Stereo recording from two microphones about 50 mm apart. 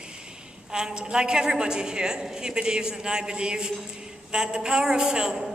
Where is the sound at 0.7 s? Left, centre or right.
Centre.